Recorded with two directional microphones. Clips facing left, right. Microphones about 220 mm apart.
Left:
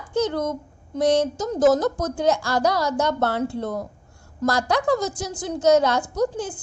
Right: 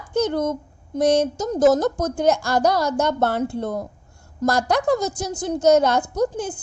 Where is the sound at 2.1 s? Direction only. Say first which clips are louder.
Right 3 dB; 45° right (ahead or behind).